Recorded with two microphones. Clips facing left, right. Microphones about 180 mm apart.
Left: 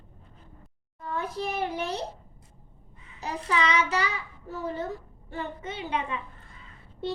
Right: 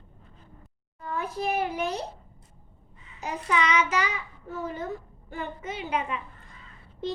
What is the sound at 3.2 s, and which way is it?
Child singing, 35° left (ahead or behind).